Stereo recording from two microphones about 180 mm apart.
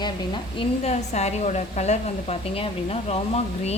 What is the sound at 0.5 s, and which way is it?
A woman's voice, 35° left (ahead or behind).